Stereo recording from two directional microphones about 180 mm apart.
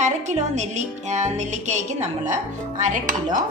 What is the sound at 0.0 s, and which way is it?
Speech, 40° right (ahead or behind).